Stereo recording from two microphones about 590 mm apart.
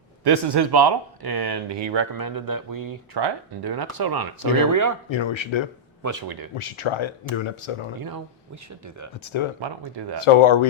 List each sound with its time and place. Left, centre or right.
0.3 s speech: right
5.0 s speech: left
6.0 s speech: right
6.6 s speech: left
10.2 s speech: left